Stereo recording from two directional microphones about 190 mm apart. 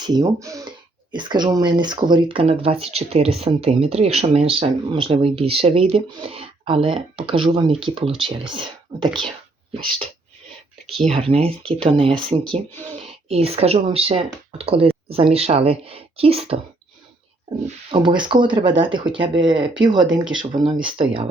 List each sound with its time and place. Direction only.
0.0 s speech: 20° right (ahead or behind)
17.9 s speech: 25° right (ahead or behind)